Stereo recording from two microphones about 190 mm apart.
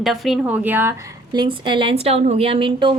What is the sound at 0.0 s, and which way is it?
A woman's voice, centre (ahead or behind).